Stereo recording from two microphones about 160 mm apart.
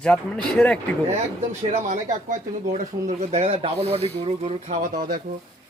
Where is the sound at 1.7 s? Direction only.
50° right (ahead or behind).